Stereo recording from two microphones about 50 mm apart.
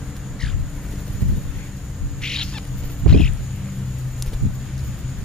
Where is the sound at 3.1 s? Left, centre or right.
Centre.